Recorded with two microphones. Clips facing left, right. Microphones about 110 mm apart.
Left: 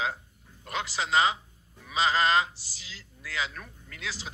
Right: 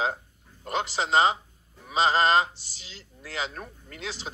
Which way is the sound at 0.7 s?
30° right (ahead or behind).